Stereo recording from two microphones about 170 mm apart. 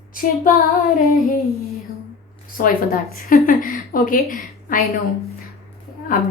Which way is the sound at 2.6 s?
55° left (ahead or behind).